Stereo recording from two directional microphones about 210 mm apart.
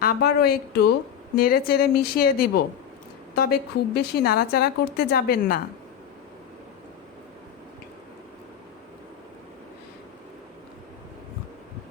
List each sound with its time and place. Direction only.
0.0 s a woman's voice: 50° left (ahead or behind)